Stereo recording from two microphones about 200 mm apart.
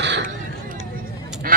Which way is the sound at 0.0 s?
60° right (ahead or behind).